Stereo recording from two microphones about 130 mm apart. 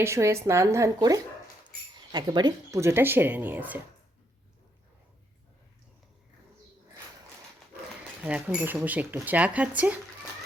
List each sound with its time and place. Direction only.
0.0 s speech: 20° right (ahead or behind)
8.2 s speech: 10° right (ahead or behind)